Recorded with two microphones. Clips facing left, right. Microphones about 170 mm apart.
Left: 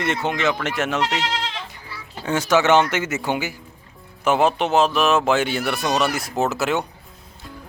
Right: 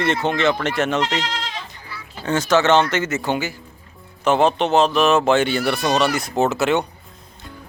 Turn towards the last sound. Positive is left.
turn(degrees=0)  # may be behind; listen again after turning